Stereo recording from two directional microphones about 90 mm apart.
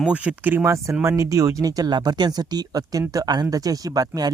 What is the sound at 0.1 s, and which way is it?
Speech, 15° right (ahead or behind).